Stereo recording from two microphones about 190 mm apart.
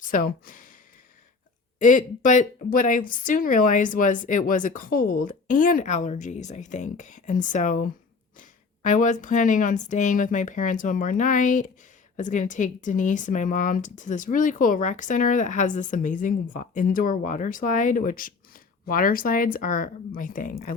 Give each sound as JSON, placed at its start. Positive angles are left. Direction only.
{"t": 0.0, "sound": "speech", "side_deg": 45}
{"t": 1.8, "sound": "speech", "side_deg": 40}